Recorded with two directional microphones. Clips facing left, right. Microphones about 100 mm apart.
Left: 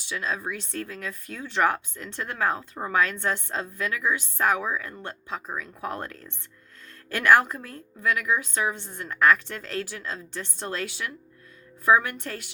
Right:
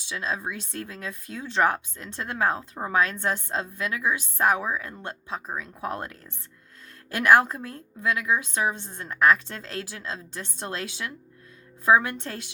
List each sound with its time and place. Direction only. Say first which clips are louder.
0.1 s speech: even; 20° right (ahead or behind)